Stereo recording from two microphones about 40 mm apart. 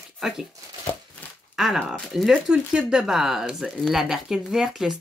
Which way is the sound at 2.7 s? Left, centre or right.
Right.